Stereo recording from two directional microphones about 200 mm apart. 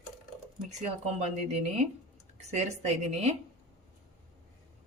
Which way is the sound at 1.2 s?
35° right (ahead or behind).